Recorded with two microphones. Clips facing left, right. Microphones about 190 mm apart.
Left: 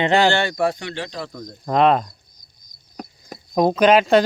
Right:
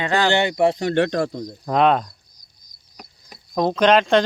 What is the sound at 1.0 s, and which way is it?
Speech, 55° right (ahead or behind).